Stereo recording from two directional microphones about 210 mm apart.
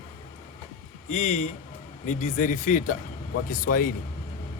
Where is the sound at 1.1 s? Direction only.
35° left (ahead or behind).